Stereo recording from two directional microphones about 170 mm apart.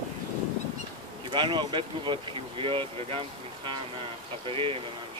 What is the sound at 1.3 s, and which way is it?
Speech, 25° right (ahead or behind).